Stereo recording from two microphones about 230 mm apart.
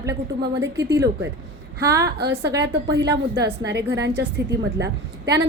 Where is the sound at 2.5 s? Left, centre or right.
Right.